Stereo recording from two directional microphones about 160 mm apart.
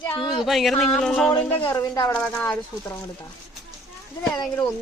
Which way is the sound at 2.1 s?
5° left (ahead or behind).